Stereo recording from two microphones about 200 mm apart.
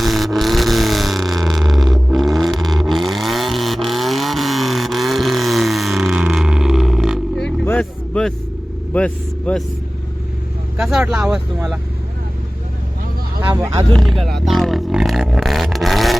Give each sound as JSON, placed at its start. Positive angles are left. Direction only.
{"t": 0.0, "sound": "vehicle", "side_deg": 0}
{"t": 8.9, "sound": "speech", "side_deg": 5}
{"t": 10.8, "sound": "speech", "side_deg": -5}
{"t": 13.4, "sound": "a sound", "side_deg": -15}
{"t": 13.9, "sound": "speech", "side_deg": 0}
{"t": 14.4, "sound": "vehicle", "side_deg": 0}